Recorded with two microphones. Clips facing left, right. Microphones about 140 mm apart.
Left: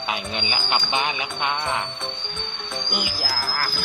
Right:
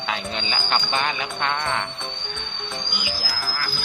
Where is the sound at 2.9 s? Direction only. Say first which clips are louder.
Left 3 dB; 55° left (ahead or behind).